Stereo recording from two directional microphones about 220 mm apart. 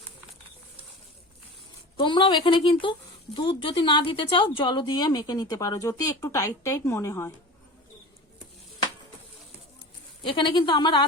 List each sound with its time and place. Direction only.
2.0 s speech: 20° left (ahead or behind)
10.2 s speech: 20° left (ahead or behind)